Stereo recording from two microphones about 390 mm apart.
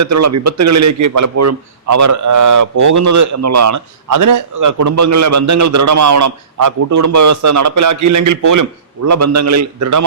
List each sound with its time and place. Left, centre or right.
0.0 s a man's voice: right